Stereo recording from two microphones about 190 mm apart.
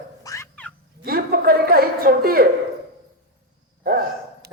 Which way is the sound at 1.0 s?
50° right (ahead or behind).